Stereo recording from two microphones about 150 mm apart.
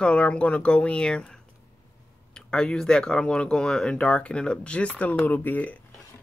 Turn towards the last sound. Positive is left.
turn(degrees=10)  # may be behind; listen again after turning